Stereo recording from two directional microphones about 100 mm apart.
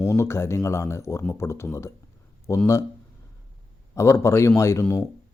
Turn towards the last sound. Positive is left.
turn(degrees=30)  # may be behind; listen again after turning